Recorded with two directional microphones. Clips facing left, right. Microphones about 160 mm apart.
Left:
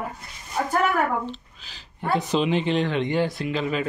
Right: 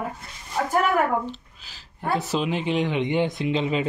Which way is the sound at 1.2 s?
10° right (ahead or behind).